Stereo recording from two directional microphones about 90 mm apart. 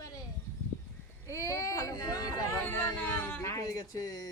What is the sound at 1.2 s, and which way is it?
Speech, 35° left (ahead or behind).